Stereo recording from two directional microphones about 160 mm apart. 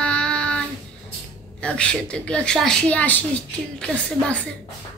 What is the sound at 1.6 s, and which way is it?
A woman's voice, 5° left (ahead or behind).